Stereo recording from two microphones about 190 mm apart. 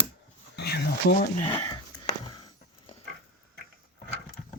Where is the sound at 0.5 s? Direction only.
60° left (ahead or behind).